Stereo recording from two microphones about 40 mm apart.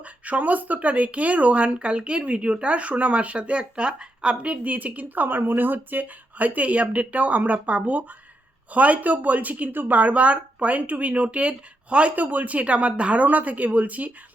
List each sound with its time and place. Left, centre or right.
0.0 s speech: right
4.7 s a woman's voice: right
12.1 s speech: right